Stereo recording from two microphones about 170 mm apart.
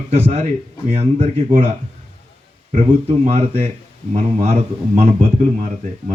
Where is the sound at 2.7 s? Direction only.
40° right (ahead or behind).